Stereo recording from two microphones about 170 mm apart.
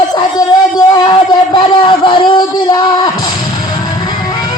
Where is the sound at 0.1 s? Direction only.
25° left (ahead or behind).